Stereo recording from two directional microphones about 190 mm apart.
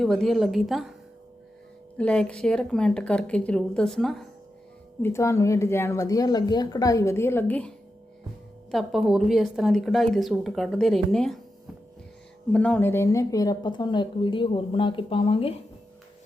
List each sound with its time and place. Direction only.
0.0 s a woman's voice: centre (ahead or behind)
2.0 s a woman's voice: 5° left (ahead or behind)
5.0 s speech: 15° left (ahead or behind)
8.7 s a woman's voice: centre (ahead or behind)
12.5 s speech: 5° left (ahead or behind); by 15.5 s 30° left (ahead or behind)